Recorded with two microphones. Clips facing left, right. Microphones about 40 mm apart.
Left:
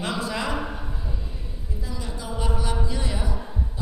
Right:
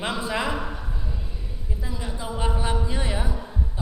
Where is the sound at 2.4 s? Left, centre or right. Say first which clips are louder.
Right 1 dB; right.